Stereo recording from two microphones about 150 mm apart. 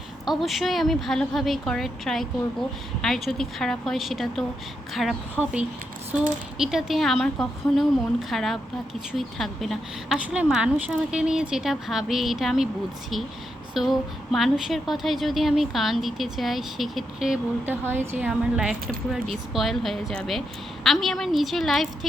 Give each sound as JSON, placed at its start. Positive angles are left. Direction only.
{"t": 0.3, "sound": "a woman's voice", "side_deg": 0}
{"t": 13.7, "sound": "a woman's voice", "side_deg": 0}
{"t": 17.8, "sound": "a woman's voice", "side_deg": -15}